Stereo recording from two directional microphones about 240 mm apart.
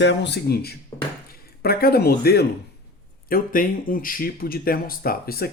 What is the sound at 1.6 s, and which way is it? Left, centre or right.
Speech, left.